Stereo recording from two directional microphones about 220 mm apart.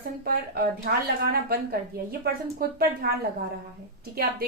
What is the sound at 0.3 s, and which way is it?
A woman's voice, 45° right (ahead or behind).